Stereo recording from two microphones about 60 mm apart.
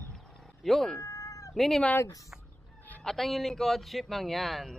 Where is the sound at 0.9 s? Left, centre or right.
Left.